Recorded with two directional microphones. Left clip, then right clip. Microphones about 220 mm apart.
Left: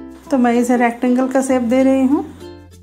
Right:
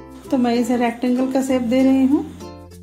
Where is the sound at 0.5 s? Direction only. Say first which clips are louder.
Left 5 dB; 55° left (ahead or behind).